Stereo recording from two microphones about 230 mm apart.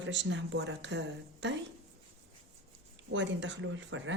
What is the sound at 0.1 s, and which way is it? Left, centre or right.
Speech, right.